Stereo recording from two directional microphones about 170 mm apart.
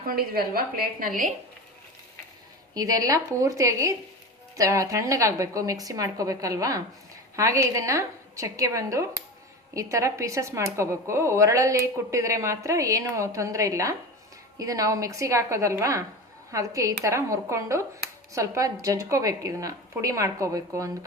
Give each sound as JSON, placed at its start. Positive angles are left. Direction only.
{"t": 0.0, "sound": "a woman's voice", "side_deg": -60}
{"t": 2.7, "sound": "a woman's voice", "side_deg": -20}